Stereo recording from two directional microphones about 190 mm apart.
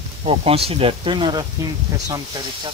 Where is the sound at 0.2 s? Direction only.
30° right (ahead or behind).